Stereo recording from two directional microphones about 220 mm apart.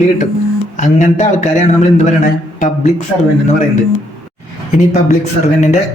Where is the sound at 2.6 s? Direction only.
30° left (ahead or behind).